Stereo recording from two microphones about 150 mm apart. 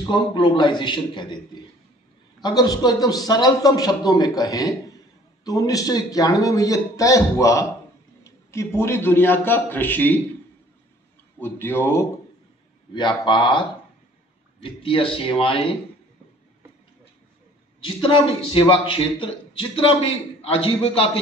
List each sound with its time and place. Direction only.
0.0 s a man's voice: 30° left (ahead or behind); by 10.2 s 10° left (ahead or behind)
11.3 s a man's voice: 15° left (ahead or behind)
12.9 s a man's voice: 30° left (ahead or behind)
17.7 s a man's voice: 35° left (ahead or behind)